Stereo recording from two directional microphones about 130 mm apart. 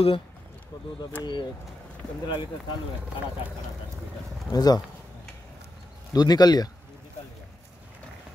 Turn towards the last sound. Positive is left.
turn(degrees=30)  # may be behind; listen again after turning